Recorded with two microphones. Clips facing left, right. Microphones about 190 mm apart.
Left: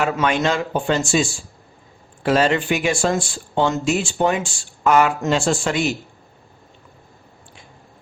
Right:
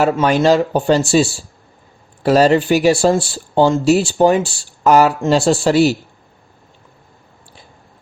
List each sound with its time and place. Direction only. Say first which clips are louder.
0.0 s speech: right 6 dB; 40° right (ahead or behind)